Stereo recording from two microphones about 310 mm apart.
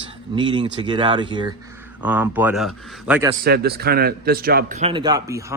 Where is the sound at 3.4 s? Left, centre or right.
Right.